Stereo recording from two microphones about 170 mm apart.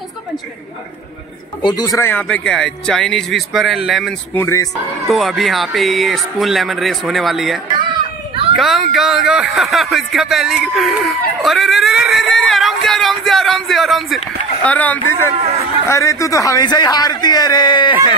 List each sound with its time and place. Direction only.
1.6 s a man's voice: 25° left (ahead or behind); by 4.1 s centre (ahead or behind)
4.4 s speech: 15° left (ahead or behind)
5.0 s a man's voice: centre (ahead or behind); by 17.9 s 25° left (ahead or behind)